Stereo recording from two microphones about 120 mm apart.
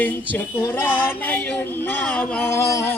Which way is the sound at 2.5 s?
25° left (ahead or behind).